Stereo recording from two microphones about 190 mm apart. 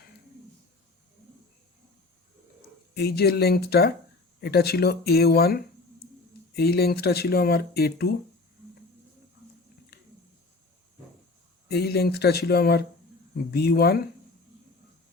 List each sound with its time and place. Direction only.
2.9 s speech: 55° left (ahead or behind)
9.9 s a sound: 55° left (ahead or behind)
11.7 s speech: 55° left (ahead or behind)